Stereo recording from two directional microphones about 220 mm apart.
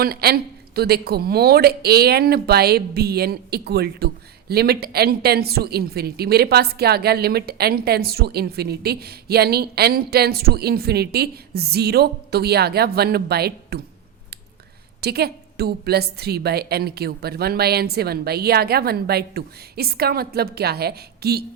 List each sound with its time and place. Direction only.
0.0 s speech: 45° right (ahead or behind)
15.0 s speech: 45° right (ahead or behind)